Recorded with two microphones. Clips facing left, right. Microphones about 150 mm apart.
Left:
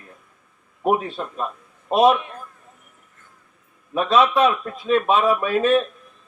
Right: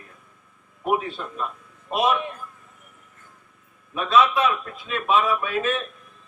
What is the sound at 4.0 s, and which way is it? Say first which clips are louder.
A man's voice: left 3 dB; 30° left (ahead or behind).